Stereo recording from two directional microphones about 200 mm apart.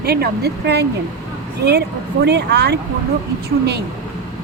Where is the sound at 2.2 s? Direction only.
55° right (ahead or behind).